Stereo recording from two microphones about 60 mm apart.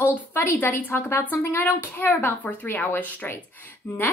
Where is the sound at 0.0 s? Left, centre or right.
Left.